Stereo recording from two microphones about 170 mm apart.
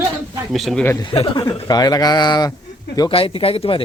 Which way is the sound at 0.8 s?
15° left (ahead or behind).